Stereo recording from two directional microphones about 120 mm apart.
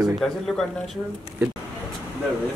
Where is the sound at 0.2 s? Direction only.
5° left (ahead or behind).